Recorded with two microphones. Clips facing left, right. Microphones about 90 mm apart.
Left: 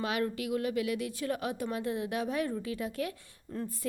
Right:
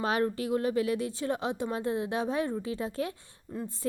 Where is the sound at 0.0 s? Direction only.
35° right (ahead or behind).